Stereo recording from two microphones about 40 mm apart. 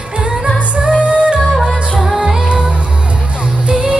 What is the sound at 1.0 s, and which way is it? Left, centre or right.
Music, right.